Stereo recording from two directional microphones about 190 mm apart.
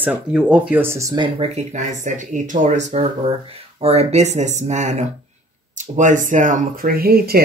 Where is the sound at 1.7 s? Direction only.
40° right (ahead or behind).